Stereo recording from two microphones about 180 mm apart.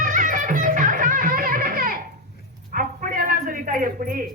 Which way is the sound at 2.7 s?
50° right (ahead or behind).